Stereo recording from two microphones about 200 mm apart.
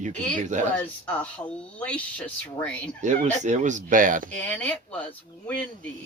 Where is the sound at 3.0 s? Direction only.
35° right (ahead or behind).